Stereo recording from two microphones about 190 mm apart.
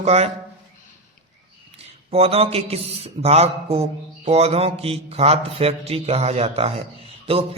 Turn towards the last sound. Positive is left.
turn(degrees=-30)  # may be behind; listen again after turning